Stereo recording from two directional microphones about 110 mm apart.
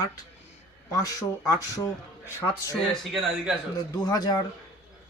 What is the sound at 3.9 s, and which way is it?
Speech, 35° left (ahead or behind).